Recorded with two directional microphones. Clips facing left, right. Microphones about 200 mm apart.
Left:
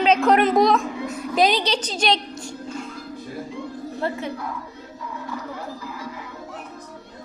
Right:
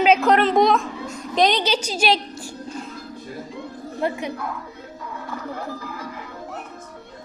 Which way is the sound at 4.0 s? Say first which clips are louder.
Right 2 dB; 15° right (ahead or behind).